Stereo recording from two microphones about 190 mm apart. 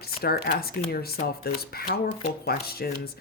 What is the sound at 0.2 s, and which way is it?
Speech, 55° left (ahead or behind).